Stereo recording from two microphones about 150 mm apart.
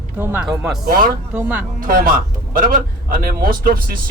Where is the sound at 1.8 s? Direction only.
70° right (ahead or behind).